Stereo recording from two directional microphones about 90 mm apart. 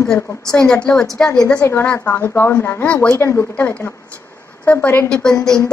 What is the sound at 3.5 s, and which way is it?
A woman's voice, 15° left (ahead or behind).